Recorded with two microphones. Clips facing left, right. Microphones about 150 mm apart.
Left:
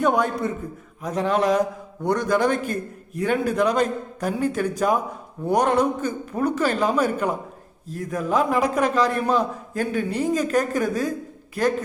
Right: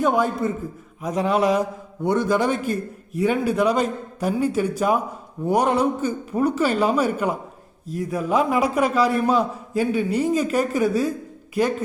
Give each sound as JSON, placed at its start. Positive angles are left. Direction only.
{"t": 0.0, "sound": "a man's voice", "side_deg": 0}
{"t": 2.6, "sound": "a man's voice", "side_deg": 50}
{"t": 3.2, "sound": "a man's voice", "side_deg": -5}